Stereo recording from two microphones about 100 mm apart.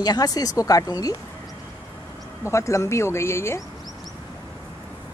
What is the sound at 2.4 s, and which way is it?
Speech, 30° left (ahead or behind).